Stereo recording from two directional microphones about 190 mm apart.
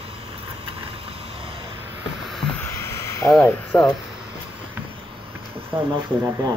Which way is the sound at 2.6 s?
15° left (ahead or behind).